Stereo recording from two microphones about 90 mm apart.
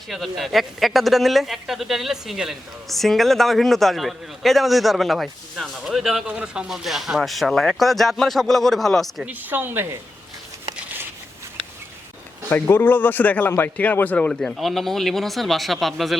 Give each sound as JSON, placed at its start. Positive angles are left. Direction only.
{"t": 0.1, "sound": "speech", "side_deg": 0}
{"t": 9.2, "sound": "a woman's voice", "side_deg": -20}
{"t": 12.5, "sound": "speech", "side_deg": 25}